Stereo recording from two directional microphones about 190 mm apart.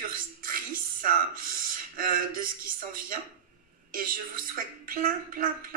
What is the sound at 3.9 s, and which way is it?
Speech, 50° right (ahead or behind).